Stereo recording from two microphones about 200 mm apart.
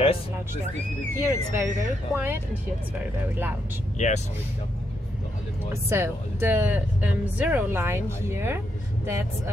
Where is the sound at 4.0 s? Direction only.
35° left (ahead or behind).